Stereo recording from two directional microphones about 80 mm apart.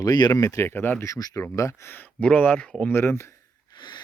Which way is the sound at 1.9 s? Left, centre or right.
Centre.